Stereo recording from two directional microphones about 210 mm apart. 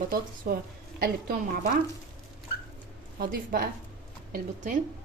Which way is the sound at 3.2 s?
45° right (ahead or behind).